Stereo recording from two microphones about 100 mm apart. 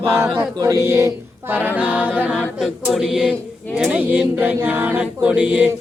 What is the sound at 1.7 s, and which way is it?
Speech, 15° right (ahead or behind).